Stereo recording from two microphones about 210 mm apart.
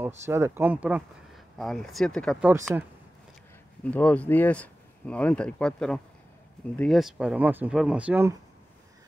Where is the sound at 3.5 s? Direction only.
5° left (ahead or behind); by 8.3 s 10° right (ahead or behind).